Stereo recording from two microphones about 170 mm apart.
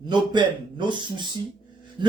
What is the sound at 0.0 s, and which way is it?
Speech, 25° right (ahead or behind).